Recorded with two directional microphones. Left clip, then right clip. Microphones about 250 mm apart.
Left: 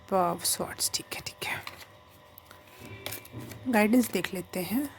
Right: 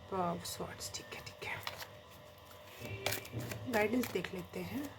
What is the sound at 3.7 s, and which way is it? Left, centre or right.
Speech, left.